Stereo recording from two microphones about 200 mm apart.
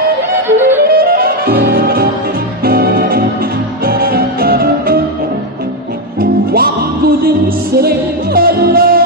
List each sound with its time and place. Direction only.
0.3 s music: 10° right (ahead or behind)
0.9 s music: 50° right (ahead or behind)
6.1 s music: 50° right (ahead or behind)